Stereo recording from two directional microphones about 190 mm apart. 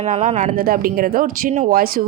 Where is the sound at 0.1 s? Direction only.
40° right (ahead or behind).